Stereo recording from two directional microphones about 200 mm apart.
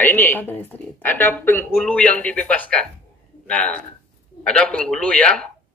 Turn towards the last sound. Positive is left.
turn(degrees=5)  # may be behind; listen again after turning